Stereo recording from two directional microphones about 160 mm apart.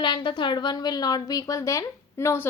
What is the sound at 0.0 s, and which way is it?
A woman's voice, 30° left (ahead or behind).